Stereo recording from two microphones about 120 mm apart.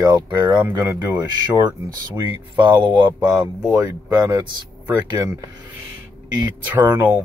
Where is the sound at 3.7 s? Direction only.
30° right (ahead or behind).